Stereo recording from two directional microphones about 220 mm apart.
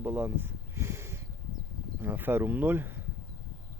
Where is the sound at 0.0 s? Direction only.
10° right (ahead or behind).